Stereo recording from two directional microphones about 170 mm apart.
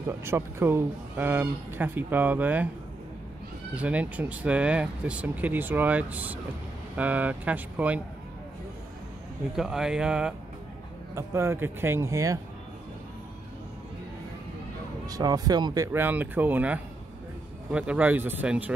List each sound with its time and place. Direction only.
0.2 s speech: 15° right (ahead or behind)
3.7 s speech: 10° right (ahead or behind)
9.6 s speech: 5° right (ahead or behind); by 12.4 s 20° right (ahead or behind)
15.0 s speech: 20° right (ahead or behind)